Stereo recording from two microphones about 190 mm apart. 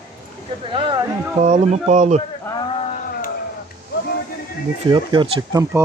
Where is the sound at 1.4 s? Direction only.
35° right (ahead or behind).